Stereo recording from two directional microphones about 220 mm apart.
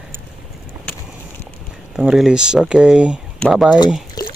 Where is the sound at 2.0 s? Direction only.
5° right (ahead or behind).